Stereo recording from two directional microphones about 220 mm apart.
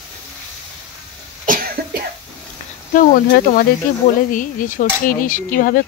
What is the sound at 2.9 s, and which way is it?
Cutlery, 35° left (ahead or behind).